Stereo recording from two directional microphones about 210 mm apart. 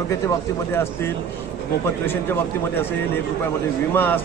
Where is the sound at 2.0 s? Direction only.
10° left (ahead or behind).